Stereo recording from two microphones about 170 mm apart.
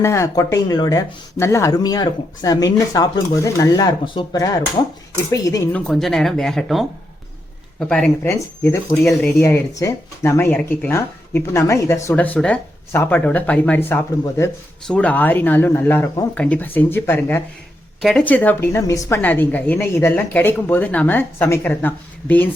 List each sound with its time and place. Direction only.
0.0 s speech: 15° left (ahead or behind)
5.7 s speech: centre (ahead or behind)
8.4 s speech: 15° left (ahead or behind)